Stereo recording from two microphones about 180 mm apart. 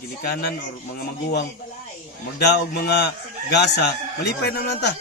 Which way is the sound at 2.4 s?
65° left (ahead or behind).